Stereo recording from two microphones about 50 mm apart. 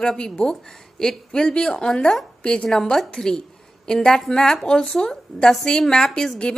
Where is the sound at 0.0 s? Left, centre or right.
Centre.